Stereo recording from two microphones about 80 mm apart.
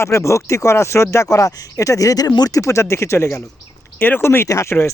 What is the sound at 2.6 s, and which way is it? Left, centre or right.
Speech, left.